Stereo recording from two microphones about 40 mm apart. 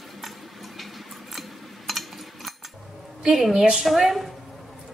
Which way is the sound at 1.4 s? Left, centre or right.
Centre.